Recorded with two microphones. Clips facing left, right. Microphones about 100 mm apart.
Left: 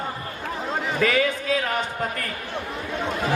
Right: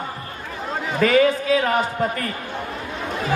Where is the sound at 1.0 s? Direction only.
40° right (ahead or behind).